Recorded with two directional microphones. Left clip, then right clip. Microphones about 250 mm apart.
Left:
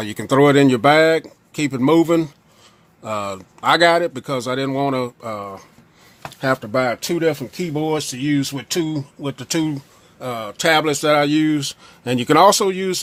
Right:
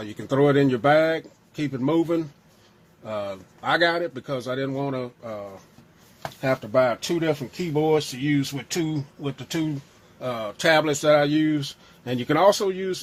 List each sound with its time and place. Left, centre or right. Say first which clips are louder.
0.0 s speech: left 7 dB; left
10.2 s speech: left 3 dB; left